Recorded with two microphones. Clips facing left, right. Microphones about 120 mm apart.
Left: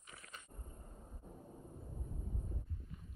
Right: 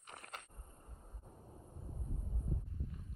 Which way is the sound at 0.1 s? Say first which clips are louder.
Right 5 dB; 55° right (ahead or behind).